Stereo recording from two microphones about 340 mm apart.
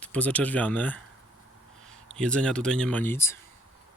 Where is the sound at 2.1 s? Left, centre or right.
Centre.